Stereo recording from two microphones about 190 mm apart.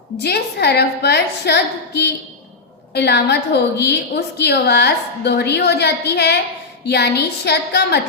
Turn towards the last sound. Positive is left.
turn(degrees=60)  # may be behind; listen again after turning